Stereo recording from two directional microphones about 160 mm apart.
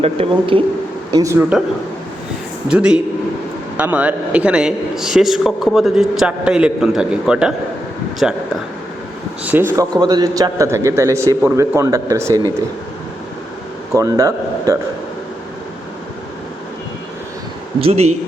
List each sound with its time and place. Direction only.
0.0 s speech: 35° right (ahead or behind)
1.1 s speech: 20° right (ahead or behind)
2.6 s a man's voice: 5° right (ahead or behind)
9.5 s a man's voice: 15° right (ahead or behind)
13.9 s a man's voice: 20° right (ahead or behind)
17.7 s speech: 40° right (ahead or behind)